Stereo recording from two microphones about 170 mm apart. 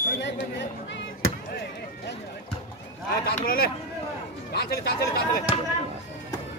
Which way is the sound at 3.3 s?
60° left (ahead or behind).